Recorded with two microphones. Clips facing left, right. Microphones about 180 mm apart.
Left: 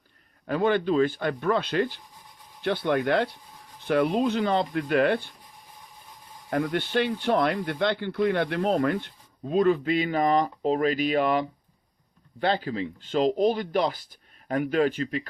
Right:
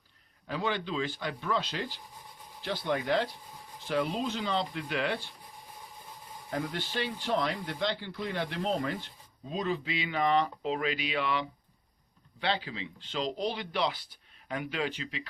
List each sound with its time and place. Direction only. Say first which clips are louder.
0.4 s speech: left 10 dB; 55° left (ahead or behind)
6.5 s speech: left 9 dB; 60° left (ahead or behind)